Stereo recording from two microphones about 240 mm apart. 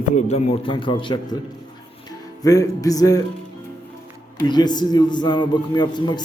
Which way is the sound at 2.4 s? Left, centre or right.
Centre.